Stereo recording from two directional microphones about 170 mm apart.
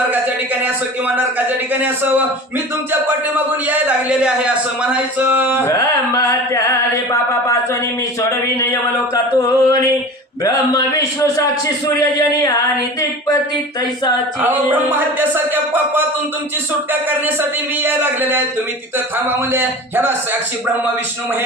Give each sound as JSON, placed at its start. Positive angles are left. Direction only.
{"t": 1.7, "sound": "a man's voice", "side_deg": -10}
{"t": 5.7, "sound": "chant", "side_deg": 20}
{"t": 14.4, "sound": "a man's voice", "side_deg": -10}
{"t": 19.5, "sound": "a man's voice", "side_deg": -10}